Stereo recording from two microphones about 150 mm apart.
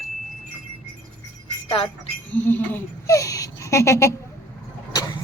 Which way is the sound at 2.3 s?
10° left (ahead or behind).